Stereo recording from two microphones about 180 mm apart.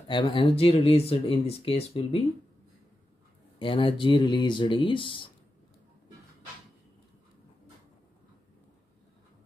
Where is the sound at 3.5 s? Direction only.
30° left (ahead or behind).